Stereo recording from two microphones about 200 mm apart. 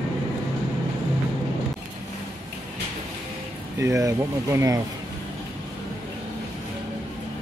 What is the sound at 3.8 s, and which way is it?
Speech, 15° right (ahead or behind).